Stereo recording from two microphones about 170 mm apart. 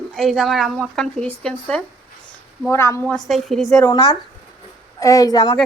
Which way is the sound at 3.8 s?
20° left (ahead or behind).